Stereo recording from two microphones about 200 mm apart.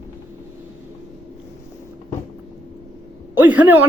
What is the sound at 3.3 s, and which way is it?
Speech, 10° right (ahead or behind).